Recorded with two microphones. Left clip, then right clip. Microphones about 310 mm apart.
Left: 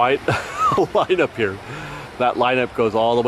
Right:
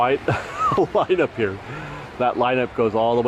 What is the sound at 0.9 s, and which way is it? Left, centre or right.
Speech, centre.